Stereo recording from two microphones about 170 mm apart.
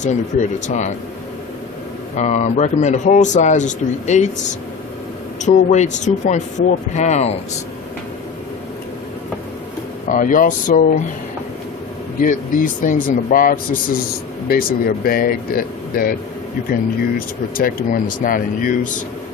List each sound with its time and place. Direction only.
0.0 s a man's voice: 45° left (ahead or behind)
2.1 s a man's voice: 45° left (ahead or behind)
5.4 s a man's voice: 45° left (ahead or behind)
10.1 s a man's voice: 50° left (ahead or behind)
12.2 s a man's voice: 50° left (ahead or behind)
17.2 s a man's voice: 55° left (ahead or behind)